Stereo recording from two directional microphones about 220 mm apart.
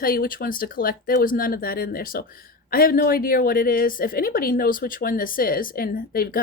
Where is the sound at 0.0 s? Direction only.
40° left (ahead or behind).